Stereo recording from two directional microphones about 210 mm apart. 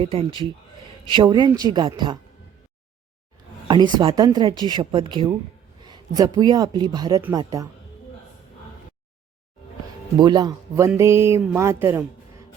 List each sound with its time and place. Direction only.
0.0 s speech: 25° right (ahead or behind)
3.7 s speech: 20° right (ahead or behind)
10.2 s speech: 20° right (ahead or behind)